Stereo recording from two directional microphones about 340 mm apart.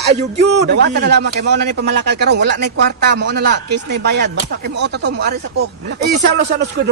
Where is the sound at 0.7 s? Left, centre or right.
Right.